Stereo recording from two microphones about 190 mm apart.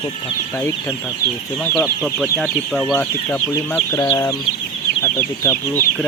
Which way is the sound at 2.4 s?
Centre (ahead or behind).